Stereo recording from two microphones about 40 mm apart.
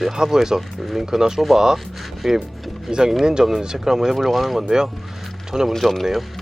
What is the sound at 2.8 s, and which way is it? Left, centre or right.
Speech, centre.